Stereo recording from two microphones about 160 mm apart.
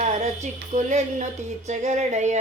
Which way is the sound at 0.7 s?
45° right (ahead or behind).